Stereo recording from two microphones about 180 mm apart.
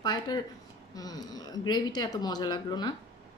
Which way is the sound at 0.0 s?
25° left (ahead or behind).